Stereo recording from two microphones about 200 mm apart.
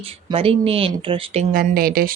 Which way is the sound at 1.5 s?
50° right (ahead or behind).